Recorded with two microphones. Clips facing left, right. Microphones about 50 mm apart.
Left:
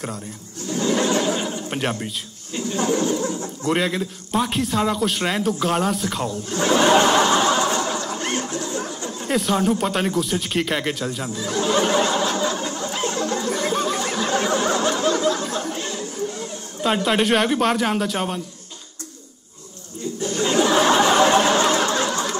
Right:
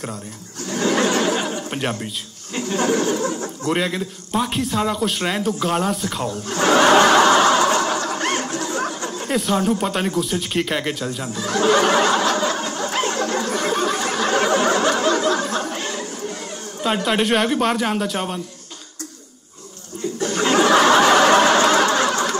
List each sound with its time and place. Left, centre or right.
0.7 s a sound: right
1.7 s a man's voice: centre
2.7 s speech: right
3.6 s a man's voice: centre
6.2 s speech: right
7.2 s snicker: right
7.7 s a sound: right
9.3 s a man's voice: centre
11.3 s snicker: right
16.8 s a man's voice: centre
20.2 s chuckle: right
21.9 s snicker: right